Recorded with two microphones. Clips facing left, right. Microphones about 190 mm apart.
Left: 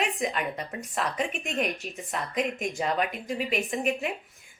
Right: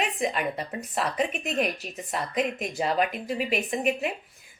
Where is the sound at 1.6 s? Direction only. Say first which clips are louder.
Right 1 dB; 35° right (ahead or behind).